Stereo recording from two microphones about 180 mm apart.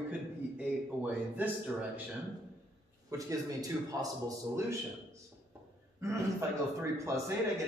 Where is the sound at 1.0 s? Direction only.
10° right (ahead or behind).